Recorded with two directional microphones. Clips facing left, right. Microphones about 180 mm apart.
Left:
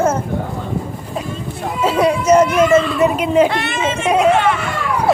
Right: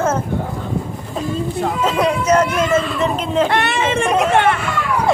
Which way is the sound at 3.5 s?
60° right (ahead or behind).